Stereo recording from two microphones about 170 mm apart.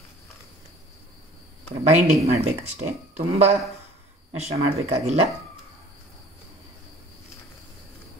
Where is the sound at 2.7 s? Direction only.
40° right (ahead or behind).